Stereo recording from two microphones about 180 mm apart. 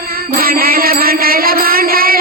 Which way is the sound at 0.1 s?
55° right (ahead or behind).